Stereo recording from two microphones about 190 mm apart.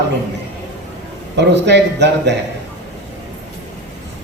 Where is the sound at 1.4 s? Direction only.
65° right (ahead or behind).